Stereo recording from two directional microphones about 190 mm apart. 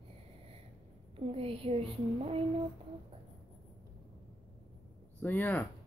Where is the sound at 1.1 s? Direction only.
30° right (ahead or behind).